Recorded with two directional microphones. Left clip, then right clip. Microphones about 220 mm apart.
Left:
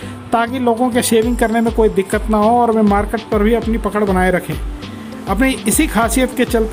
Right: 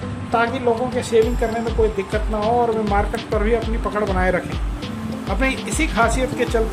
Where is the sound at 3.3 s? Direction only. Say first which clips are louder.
Left 5 dB; 20° left (ahead or behind).